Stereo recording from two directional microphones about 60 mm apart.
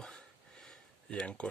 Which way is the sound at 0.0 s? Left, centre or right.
Centre.